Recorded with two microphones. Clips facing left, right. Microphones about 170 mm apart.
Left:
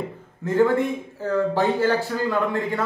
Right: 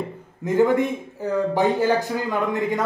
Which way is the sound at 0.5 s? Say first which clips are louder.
Right 1 dB; 15° right (ahead or behind).